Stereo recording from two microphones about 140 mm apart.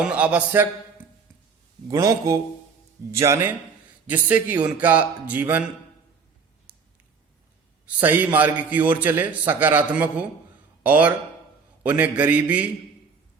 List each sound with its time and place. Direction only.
0.0 s a man's voice: 10° right (ahead or behind)
1.9 s a man's voice: 25° right (ahead or behind)
6.7 s a sound: 10° right (ahead or behind)
7.9 s a man's voice: 10° right (ahead or behind)